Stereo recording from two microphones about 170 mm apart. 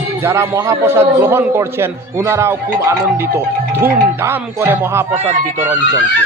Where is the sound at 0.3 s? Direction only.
15° right (ahead or behind).